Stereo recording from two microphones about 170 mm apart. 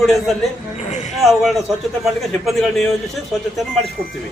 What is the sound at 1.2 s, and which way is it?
A man's voice, centre (ahead or behind).